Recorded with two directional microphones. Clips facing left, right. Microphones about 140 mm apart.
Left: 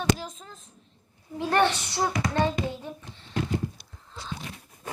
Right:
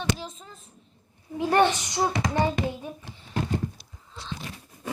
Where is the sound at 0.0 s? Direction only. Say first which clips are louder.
Left 3 dB; centre (ahead or behind).